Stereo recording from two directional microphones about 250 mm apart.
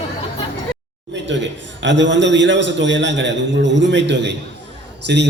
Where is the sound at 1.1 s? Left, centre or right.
Right.